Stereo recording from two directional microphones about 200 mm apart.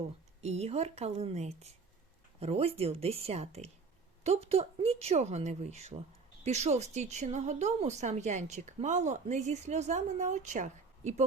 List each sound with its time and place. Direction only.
0.4 s a woman's voice: 30° right (ahead or behind)